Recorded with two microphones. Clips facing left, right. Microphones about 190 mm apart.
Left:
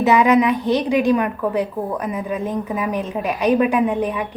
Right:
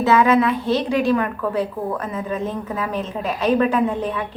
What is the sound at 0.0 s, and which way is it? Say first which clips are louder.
A woman's voice: left 1 dB; 15° left (ahead or behind).